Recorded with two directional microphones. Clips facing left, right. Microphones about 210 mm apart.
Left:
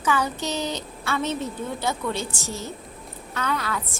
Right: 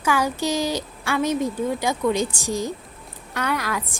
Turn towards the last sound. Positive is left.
turn(degrees=-10)  # may be behind; listen again after turning